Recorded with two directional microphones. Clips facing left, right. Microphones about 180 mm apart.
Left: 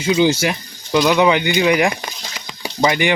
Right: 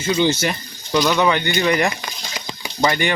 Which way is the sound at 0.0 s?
10° left (ahead or behind).